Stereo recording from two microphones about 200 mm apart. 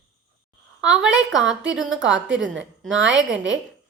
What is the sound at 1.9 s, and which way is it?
Speech, 70° right (ahead or behind).